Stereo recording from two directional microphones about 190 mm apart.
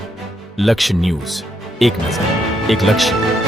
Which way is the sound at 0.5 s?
Centre (ahead or behind).